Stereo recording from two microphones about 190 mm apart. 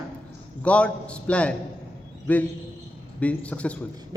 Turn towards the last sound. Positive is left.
turn(degrees=5)  # may be behind; listen again after turning